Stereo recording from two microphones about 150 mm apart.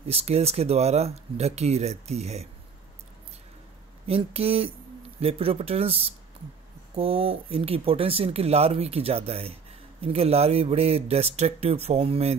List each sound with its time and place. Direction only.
0.1 s speech: 45° right (ahead or behind)
4.1 s speech: 40° right (ahead or behind)